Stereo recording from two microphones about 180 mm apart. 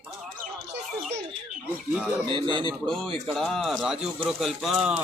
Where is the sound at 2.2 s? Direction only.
25° right (ahead or behind).